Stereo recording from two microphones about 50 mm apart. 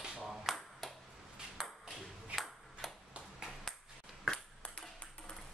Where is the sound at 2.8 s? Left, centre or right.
Centre.